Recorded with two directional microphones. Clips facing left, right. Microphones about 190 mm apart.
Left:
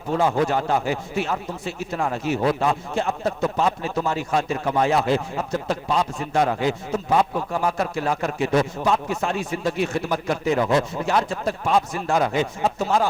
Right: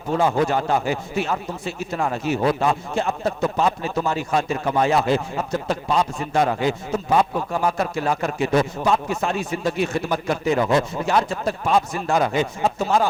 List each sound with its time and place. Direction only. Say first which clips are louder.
0.1 s speech: right 1 dB; 30° right (ahead or behind)